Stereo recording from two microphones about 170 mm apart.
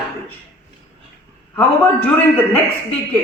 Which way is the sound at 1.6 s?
10° left (ahead or behind).